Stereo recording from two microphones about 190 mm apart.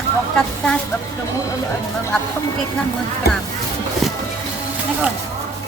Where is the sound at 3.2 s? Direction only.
55° left (ahead or behind).